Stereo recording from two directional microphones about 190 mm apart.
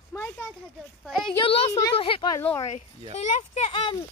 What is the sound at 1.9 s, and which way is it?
Speech, 30° left (ahead or behind).